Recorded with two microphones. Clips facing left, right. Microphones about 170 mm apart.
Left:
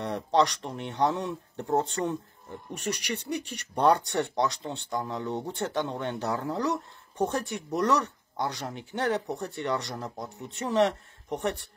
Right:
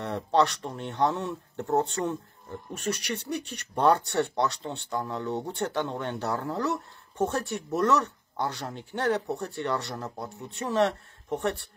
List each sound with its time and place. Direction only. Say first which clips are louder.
0.0 s speech: even; 15° left (ahead or behind)
2.9 s speech: right 1 dB; 70° left (ahead or behind)
3.2 s speech: even; 15° left (ahead or behind)